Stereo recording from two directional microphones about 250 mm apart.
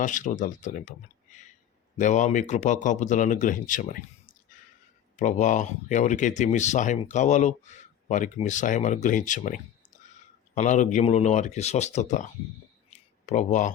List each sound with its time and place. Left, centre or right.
0.0 s speech: left
2.0 s speech: left
12.9 s a sound: left